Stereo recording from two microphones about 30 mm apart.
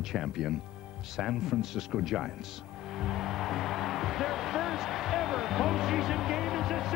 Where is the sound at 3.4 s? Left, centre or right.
Centre.